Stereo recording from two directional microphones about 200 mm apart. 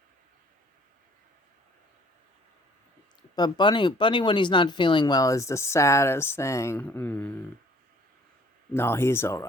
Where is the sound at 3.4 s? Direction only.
20° left (ahead or behind).